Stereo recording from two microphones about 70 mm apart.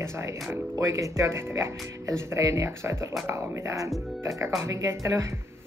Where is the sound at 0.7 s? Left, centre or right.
Right.